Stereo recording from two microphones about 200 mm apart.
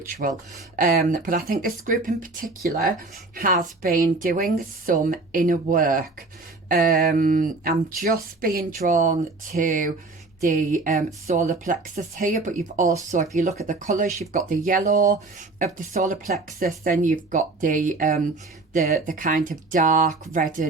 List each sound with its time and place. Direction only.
0.1 s speech: 40° right (ahead or behind)